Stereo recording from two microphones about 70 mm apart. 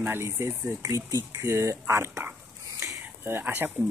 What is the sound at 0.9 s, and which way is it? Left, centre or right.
Speech, right.